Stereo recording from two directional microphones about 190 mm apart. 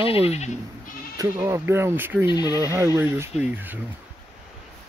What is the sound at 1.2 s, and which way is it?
Speech, 15° right (ahead or behind).